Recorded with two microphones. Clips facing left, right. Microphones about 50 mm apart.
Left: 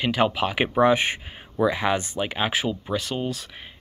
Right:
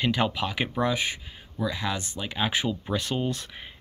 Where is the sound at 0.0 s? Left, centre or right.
Centre.